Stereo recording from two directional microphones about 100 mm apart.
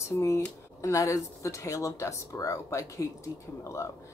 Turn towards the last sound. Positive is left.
turn(degrees=30)  # may be behind; listen again after turning